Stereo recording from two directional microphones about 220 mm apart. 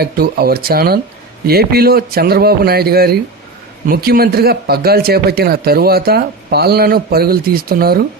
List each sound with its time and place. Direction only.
0.0 s speech: 45° right (ahead or behind)